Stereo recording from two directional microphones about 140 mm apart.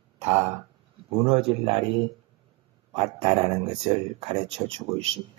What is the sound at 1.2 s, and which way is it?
Speech, 45° right (ahead or behind).